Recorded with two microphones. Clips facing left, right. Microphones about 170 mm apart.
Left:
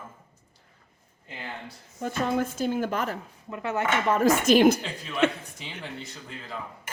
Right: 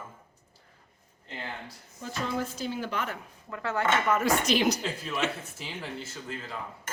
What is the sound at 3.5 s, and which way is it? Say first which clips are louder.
Dishes: left 1 dB; 20° left (ahead or behind).